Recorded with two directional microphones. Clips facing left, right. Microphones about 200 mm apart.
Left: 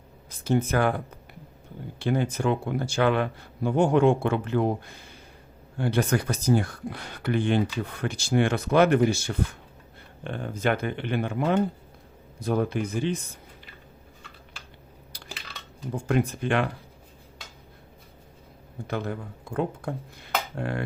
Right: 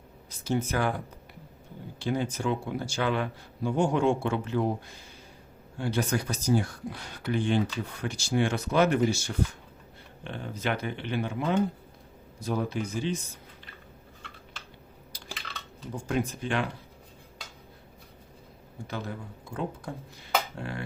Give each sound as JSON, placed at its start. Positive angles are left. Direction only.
{"t": 0.3, "sound": "speech", "side_deg": 55}
{"t": 2.0, "sound": "speech", "side_deg": 60}
{"t": 15.1, "sound": "a sound", "side_deg": 60}
{"t": 16.0, "sound": "speech", "side_deg": 60}
{"t": 18.9, "sound": "speech", "side_deg": 55}